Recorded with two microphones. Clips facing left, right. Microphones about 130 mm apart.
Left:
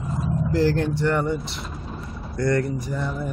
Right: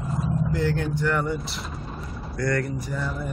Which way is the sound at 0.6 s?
Centre (ahead or behind).